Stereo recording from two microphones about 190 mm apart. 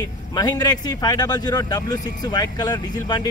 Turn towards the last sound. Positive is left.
turn(degrees=20)  # may be behind; listen again after turning